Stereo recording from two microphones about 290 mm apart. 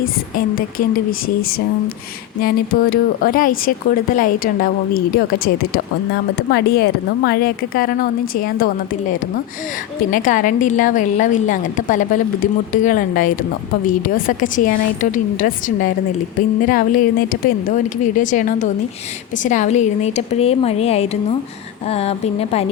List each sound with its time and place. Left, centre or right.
0.0 s speech: left
2.4 s a woman's voice: left